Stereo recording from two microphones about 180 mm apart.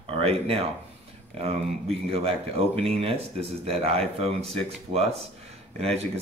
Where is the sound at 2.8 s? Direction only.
35° right (ahead or behind).